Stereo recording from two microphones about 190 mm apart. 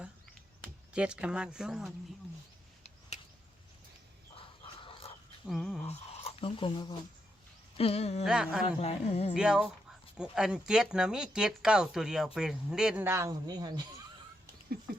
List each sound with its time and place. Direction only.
0.9 s speech: 5° right (ahead or behind)
4.4 s bird: 30° left (ahead or behind)
5.5 s speech: centre (ahead or behind)
5.9 s speech: 35° left (ahead or behind)
8.2 s speech: 5° right (ahead or behind)
8.6 s speech: 30° left (ahead or behind)
9.3 s speech: 5° right (ahead or behind); by 13.8 s 20° right (ahead or behind)